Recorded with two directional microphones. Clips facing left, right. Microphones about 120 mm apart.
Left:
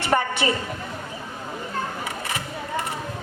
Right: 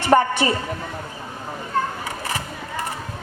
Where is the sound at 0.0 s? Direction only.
40° right (ahead or behind).